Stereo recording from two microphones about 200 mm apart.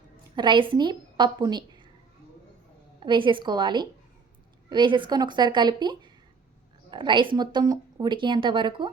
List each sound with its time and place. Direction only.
0.3 s a woman's voice: 25° right (ahead or behind)
3.0 s speech: 25° right (ahead or behind)